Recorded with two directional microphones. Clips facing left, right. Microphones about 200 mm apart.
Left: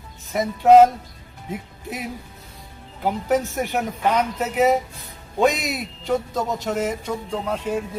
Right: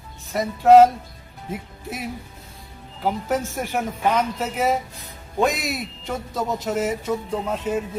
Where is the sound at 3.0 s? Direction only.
Centre (ahead or behind).